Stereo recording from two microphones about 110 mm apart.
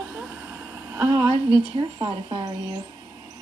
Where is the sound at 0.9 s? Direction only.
30° right (ahead or behind).